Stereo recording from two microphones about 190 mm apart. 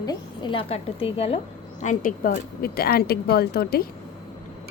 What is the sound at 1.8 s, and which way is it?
Speech, 45° left (ahead or behind).